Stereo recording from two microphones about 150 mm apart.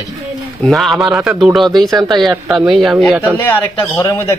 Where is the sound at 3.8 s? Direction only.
20° left (ahead or behind).